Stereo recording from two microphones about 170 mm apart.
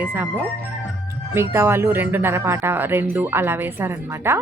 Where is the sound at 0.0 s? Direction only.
10° right (ahead or behind).